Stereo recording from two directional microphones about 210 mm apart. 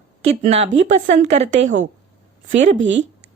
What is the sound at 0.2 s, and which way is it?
Speech, 30° right (ahead or behind).